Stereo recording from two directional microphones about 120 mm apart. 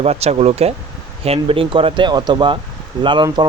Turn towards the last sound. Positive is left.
turn(degrees=-40)  # may be behind; listen again after turning